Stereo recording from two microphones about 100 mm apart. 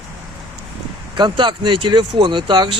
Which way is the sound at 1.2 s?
50° right (ahead or behind).